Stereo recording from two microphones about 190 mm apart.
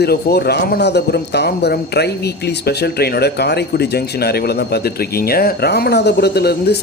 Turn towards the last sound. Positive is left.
turn(degrees=60)  # may be behind; listen again after turning